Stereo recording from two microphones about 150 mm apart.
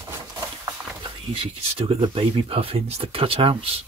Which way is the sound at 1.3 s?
40° right (ahead or behind).